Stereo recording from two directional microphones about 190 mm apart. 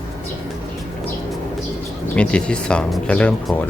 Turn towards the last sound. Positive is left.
turn(degrees=5)  # may be behind; listen again after turning